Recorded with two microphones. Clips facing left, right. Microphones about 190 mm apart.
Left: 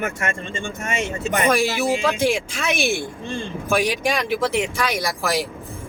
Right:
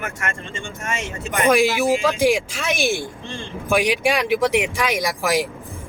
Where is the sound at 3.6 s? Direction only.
15° right (ahead or behind).